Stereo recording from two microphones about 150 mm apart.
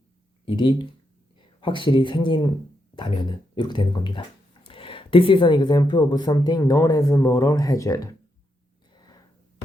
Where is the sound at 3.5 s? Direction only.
30° left (ahead or behind).